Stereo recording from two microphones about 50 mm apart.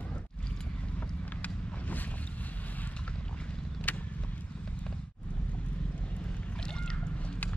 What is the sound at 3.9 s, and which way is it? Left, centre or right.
Vehicle, left.